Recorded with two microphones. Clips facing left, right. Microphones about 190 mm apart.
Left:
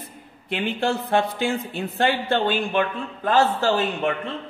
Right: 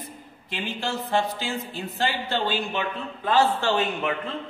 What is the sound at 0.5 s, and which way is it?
Speech, 55° left (ahead or behind).